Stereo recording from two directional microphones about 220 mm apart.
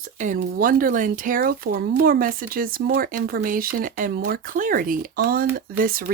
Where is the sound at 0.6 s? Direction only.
40° right (ahead or behind).